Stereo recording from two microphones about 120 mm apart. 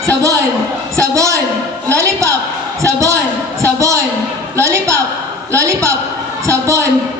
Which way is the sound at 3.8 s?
25° right (ahead or behind).